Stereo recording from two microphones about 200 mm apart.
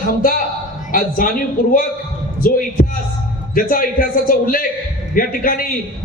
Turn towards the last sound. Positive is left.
turn(degrees=45)  # may be behind; listen again after turning